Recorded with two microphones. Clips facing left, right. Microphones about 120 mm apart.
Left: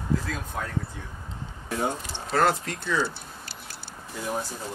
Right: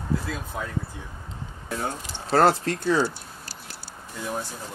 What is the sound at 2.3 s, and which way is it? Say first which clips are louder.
Speech: right 4 dB; 35° right (ahead or behind).